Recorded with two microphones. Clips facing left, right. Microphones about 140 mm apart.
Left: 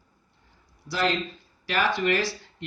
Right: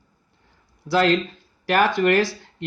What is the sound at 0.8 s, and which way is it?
Speech, 60° right (ahead or behind).